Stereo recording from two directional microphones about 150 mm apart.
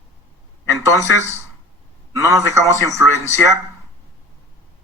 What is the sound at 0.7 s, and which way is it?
Speech, 20° right (ahead or behind).